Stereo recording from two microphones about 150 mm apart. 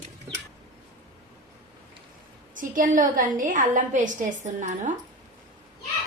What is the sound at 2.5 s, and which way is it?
A woman's voice, 65° right (ahead or behind).